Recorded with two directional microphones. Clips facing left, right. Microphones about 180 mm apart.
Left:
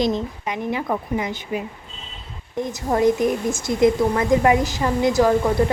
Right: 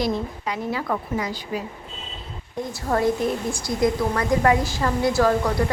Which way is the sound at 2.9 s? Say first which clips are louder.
Left 3 dB; 15° left (ahead or behind).